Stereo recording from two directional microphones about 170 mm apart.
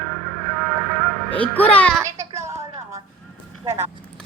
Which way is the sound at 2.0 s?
15° right (ahead or behind).